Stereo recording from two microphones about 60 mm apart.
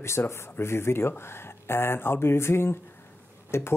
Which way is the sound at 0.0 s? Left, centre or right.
Left.